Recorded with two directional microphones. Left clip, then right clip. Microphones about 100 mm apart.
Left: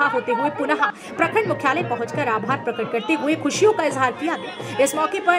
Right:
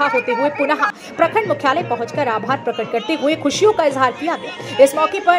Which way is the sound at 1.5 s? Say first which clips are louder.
Right 4 dB; 30° right (ahead or behind).